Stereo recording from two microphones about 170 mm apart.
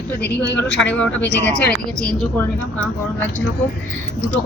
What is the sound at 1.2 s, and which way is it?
Speech, 90° left.